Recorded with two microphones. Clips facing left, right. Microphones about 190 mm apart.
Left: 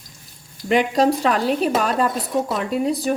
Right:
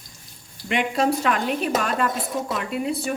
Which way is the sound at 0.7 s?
35° left (ahead or behind).